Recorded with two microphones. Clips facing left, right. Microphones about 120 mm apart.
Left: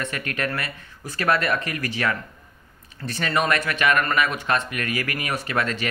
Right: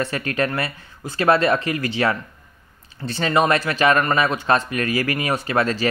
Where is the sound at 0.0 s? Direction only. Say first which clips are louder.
Right 5 dB; 30° right (ahead or behind).